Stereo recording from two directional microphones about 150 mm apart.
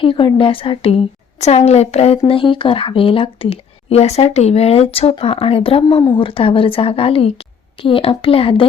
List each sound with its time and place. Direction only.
0.0 s a woman's voice: 35° left (ahead or behind)